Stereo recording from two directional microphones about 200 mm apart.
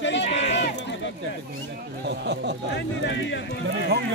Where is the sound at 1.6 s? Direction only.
60° right (ahead or behind).